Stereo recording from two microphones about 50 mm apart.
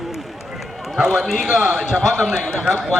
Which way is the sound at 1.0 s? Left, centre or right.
Centre.